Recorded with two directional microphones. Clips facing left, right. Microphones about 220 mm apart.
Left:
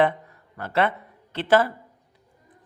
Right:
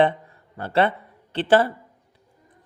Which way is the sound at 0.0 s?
30° right (ahead or behind).